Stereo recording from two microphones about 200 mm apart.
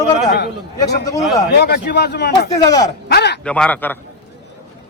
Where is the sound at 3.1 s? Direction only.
55° left (ahead or behind).